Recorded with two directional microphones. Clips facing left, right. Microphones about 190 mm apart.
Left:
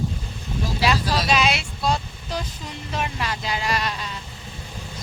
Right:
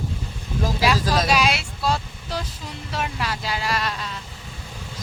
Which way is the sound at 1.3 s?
5° right (ahead or behind).